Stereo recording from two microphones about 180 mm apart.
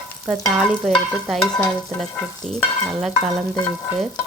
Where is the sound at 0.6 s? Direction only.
Centre (ahead or behind).